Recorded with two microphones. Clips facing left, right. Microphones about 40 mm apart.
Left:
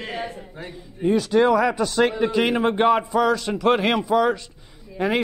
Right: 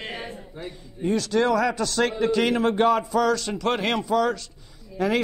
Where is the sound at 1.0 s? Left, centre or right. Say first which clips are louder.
Left 4 dB; centre.